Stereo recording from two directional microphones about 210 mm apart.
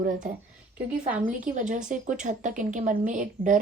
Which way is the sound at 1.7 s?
35° right (ahead or behind).